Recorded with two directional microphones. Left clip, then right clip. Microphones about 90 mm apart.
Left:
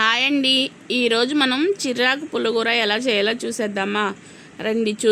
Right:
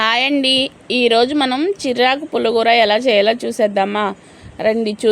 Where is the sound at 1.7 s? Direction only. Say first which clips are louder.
Right 5 dB; 40° right (ahead or behind).